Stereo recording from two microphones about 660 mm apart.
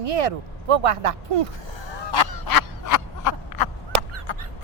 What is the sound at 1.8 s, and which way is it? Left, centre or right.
Honk, left.